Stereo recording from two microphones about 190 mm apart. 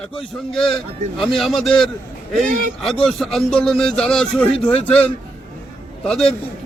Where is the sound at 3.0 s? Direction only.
Centre (ahead or behind).